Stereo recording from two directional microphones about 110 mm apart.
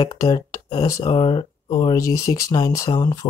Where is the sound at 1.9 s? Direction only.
30° left (ahead or behind).